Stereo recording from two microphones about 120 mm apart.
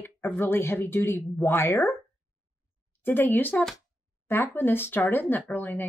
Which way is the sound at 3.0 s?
15° left (ahead or behind).